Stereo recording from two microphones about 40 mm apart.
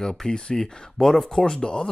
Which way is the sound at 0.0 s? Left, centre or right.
Centre.